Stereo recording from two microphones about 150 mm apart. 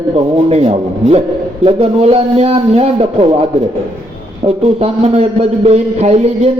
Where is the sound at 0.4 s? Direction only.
45° right (ahead or behind).